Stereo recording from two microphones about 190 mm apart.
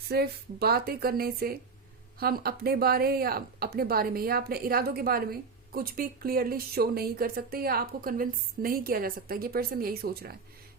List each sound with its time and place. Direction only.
0.1 s speech: 55° right (ahead or behind)